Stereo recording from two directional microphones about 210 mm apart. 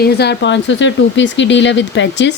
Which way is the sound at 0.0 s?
50° left (ahead or behind).